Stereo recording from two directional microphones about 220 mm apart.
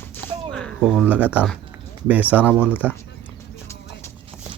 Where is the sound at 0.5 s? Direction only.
Centre (ahead or behind).